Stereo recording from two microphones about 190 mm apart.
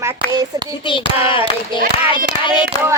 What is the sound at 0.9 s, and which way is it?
Hands, 25° left (ahead or behind).